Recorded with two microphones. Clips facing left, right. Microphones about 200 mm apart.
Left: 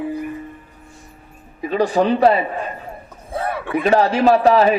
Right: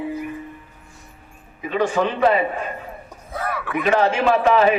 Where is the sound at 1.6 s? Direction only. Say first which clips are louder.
Left 3 dB; 35° left (ahead or behind).